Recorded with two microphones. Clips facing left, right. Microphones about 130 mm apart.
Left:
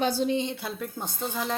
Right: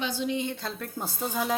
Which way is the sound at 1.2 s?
10° right (ahead or behind).